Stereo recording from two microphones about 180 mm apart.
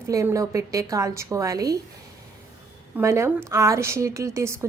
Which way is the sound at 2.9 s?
15° right (ahead or behind).